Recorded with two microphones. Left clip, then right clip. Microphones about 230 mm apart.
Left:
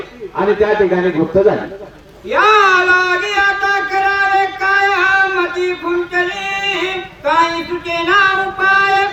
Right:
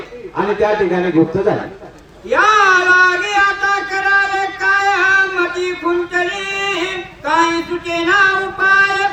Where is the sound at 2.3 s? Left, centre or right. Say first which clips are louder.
Left 1 dB; centre.